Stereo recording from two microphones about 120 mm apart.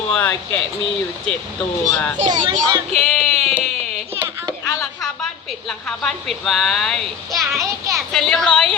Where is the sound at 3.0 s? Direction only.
Centre (ahead or behind).